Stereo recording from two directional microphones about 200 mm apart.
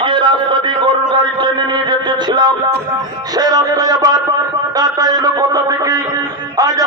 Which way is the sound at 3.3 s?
20° right (ahead or behind).